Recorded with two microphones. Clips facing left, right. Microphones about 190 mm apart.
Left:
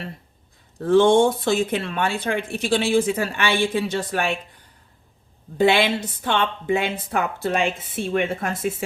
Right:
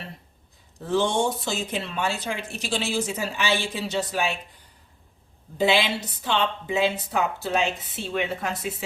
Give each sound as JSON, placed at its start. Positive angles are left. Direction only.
{"t": 0.8, "sound": "speech", "side_deg": 55}
{"t": 5.5, "sound": "speech", "side_deg": 55}